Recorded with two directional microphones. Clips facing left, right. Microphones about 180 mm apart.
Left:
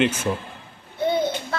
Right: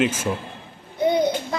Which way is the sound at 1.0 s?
15° right (ahead or behind).